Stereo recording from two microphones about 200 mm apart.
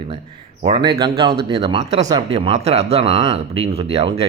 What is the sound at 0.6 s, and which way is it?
A man's voice, 30° right (ahead or behind).